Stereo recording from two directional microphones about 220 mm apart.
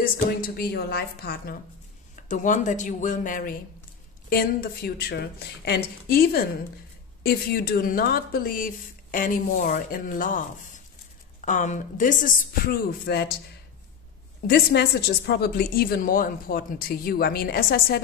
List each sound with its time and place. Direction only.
0.6 s a woman's voice: 45° left (ahead or behind)
11.4 s a woman's voice: 35° left (ahead or behind)
14.5 s a woman's voice: 45° left (ahead or behind)